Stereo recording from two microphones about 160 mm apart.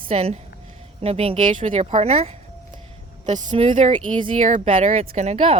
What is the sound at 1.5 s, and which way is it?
Speech, 50° right (ahead or behind).